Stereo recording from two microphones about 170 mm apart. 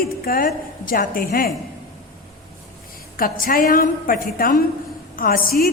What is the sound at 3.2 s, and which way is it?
A woman's voice, 60° left (ahead or behind).